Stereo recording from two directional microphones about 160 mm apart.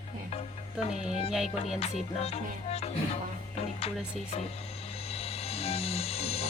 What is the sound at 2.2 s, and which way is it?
Music, 40° left (ahead or behind).